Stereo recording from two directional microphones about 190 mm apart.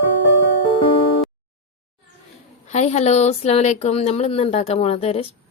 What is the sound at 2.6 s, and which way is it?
Speech, 35° left (ahead or behind).